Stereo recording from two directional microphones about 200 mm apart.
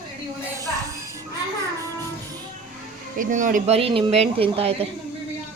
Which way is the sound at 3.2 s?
40° right (ahead or behind).